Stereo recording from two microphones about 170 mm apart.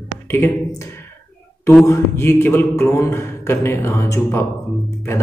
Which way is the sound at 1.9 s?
15° left (ahead or behind).